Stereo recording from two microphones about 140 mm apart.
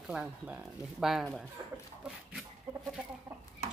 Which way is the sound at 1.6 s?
25° right (ahead or behind).